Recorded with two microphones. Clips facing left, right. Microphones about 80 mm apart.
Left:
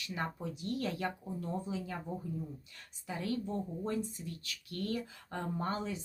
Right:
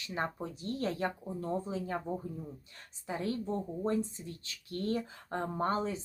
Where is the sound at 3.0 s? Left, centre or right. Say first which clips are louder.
Right 2 dB; right.